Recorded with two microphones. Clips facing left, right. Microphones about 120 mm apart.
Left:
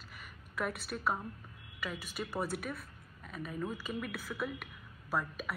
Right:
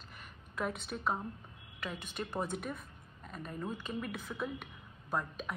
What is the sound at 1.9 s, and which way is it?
Speech, 5° left (ahead or behind).